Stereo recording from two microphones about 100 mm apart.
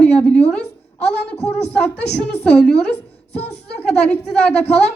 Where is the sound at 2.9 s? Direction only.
90° left.